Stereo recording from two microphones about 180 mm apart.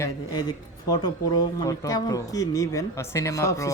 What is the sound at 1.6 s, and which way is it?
Speech, 20° left (ahead or behind).